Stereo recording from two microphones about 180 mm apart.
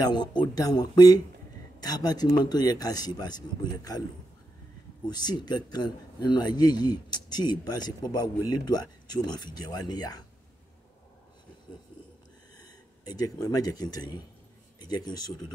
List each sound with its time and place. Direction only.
0.0 s a man's voice: 25° left (ahead or behind)
5.0 s a man's voice: 25° left (ahead or behind)
13.0 s a man's voice: 20° left (ahead or behind)